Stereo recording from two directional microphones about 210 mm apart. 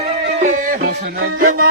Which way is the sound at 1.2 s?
50° right (ahead or behind).